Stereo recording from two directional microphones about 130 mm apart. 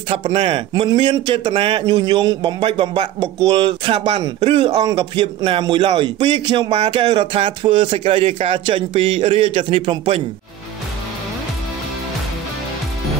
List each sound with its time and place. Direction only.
0.3 s speech: 45° right (ahead or behind)